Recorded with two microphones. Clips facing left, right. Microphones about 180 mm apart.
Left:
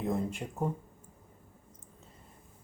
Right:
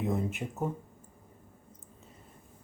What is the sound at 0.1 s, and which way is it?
Speech, 5° right (ahead or behind).